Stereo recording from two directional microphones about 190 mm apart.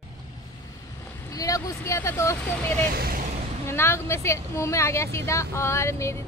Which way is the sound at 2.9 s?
50° right (ahead or behind).